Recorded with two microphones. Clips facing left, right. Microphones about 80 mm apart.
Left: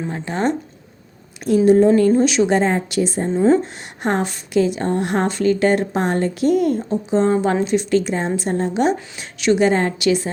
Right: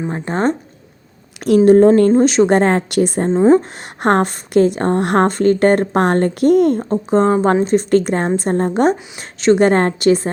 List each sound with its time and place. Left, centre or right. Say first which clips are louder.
0.1 s speech: right 3 dB; right
1.5 s speech: right 4 dB; right
2.0 s a woman's voice: right 4 dB; right
3.2 s speech: right 3 dB; right
3.6 s a woman's voice: right 4 dB; right
9.6 s a woman's voice: right 4 dB; right